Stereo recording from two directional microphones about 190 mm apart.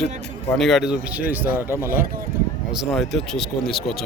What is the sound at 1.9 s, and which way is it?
Speech, 50° right (ahead or behind).